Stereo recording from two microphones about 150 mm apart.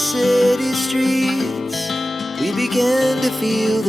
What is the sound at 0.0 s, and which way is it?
Music, centre (ahead or behind).